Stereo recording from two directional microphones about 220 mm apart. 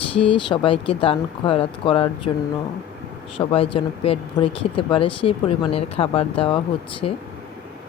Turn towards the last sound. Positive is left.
turn(degrees=30)  # may be behind; listen again after turning